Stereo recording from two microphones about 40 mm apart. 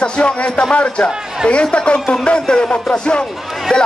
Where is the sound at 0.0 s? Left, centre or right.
Left.